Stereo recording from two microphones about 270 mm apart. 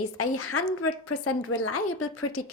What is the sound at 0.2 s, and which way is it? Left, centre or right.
A woman's voice, left.